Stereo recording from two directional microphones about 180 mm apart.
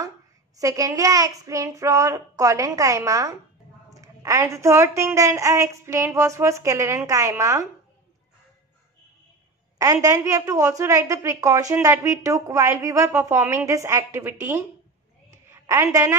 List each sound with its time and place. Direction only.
0.6 s child singing: 20° right (ahead or behind)
3.9 s a woman's voice: 20° right (ahead or behind)
10.0 s a woman's voice: 15° right (ahead or behind)